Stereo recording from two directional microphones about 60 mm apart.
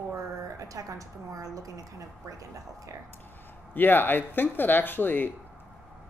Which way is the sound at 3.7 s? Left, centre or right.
Left.